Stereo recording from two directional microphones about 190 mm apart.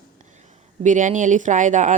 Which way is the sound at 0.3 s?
40° right (ahead or behind).